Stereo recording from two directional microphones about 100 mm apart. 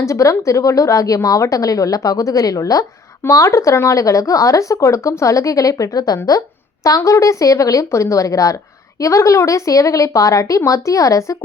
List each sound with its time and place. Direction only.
0.0 s speech: 30° left (ahead or behind)